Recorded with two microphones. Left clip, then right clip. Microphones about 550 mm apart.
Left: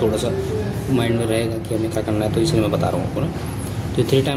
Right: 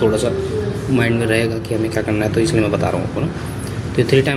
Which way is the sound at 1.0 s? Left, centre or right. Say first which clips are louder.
Right 3 dB; left.